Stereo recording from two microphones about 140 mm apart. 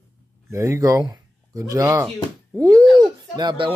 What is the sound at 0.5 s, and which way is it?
Speech, 20° right (ahead or behind).